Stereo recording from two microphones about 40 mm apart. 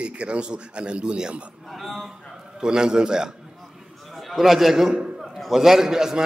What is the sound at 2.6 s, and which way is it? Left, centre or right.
Speech, centre.